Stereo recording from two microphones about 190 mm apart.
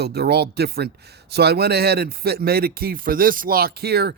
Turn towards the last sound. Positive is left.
turn(degrees=-55)  # may be behind; listen again after turning